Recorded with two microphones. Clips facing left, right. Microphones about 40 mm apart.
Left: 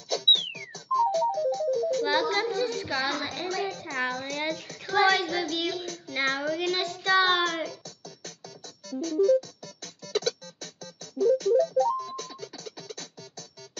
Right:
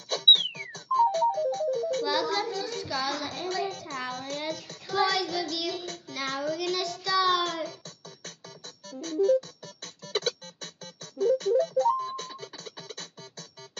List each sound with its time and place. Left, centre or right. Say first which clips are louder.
0.1 s music: right 2 dB; right
2.0 s child singing: left 2 dB; left
3.9 s a child's voice: left 5 dB; left
4.4 s child singing: left 3 dB; left
8.8 s music: left 2 dB; right